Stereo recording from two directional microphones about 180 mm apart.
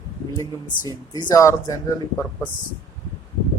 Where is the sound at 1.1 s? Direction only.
20° left (ahead or behind).